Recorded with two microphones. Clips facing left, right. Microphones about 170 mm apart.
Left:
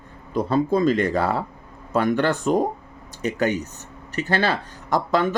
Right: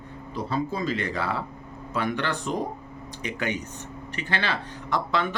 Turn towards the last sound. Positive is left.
turn(degrees=45)  # may be behind; listen again after turning